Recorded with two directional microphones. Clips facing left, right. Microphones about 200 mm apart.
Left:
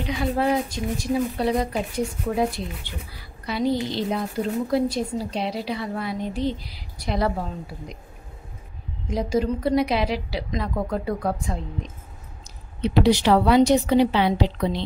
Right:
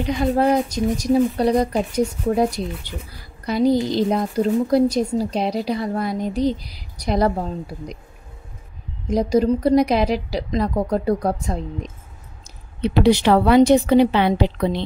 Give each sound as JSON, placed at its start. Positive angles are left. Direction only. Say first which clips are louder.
{"t": 0.2, "sound": "a woman's voice", "louder": "right 4 dB", "side_deg": -40}
{"t": 3.4, "sound": "music", "louder": "right 6 dB", "side_deg": -40}
{"t": 4.6, "sound": "a woman's voice", "louder": "right 6 dB", "side_deg": -40}
{"t": 9.0, "sound": "a woman's voice", "louder": "right 6 dB", "side_deg": -40}
{"t": 12.8, "sound": "a woman's voice", "louder": "right 3 dB", "side_deg": -55}